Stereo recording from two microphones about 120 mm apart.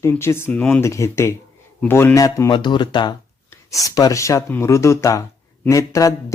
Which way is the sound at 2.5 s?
40° left (ahead or behind).